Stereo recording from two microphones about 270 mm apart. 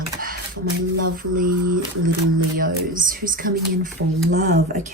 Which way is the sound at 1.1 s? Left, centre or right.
Right.